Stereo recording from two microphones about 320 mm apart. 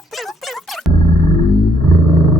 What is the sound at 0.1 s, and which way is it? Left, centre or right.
Music, centre.